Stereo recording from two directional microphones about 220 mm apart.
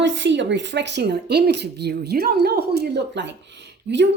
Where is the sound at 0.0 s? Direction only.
55° right (ahead or behind).